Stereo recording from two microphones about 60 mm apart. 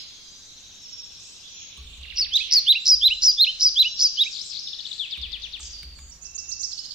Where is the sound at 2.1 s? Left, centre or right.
Centre.